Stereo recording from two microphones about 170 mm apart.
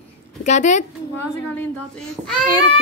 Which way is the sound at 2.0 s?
Centre (ahead or behind).